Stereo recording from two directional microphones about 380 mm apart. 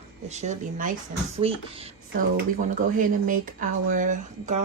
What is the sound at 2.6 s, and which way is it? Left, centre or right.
Speech, right.